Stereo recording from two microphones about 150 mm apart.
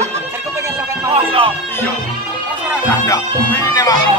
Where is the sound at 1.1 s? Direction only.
35° right (ahead or behind).